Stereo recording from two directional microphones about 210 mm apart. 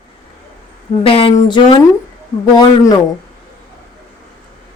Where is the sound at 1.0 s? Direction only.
25° left (ahead or behind).